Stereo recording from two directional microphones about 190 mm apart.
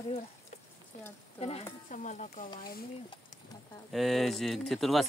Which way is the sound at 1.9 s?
40° left (ahead or behind).